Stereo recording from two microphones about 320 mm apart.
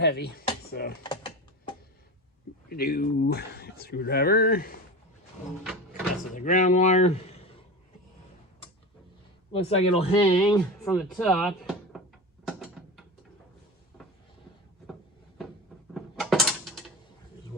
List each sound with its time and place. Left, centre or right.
0.0 s speech: left
0.7 s mechanisms: left
1.0 s mechanisms: centre
2.6 s speech: left
6.3 s speech: left
9.5 s speech: centre
10.6 s speech: centre
12.5 s a sound: centre
16.0 s mechanisms: centre